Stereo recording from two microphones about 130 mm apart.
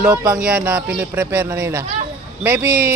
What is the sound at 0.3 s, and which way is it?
Speech, 10° right (ahead or behind).